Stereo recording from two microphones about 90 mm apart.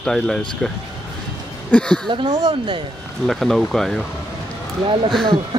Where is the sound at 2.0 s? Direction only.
55° right (ahead or behind).